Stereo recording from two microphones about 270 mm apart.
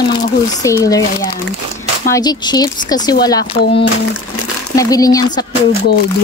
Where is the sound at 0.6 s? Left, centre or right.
Centre.